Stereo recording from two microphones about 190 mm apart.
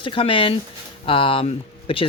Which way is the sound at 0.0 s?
25° left (ahead or behind).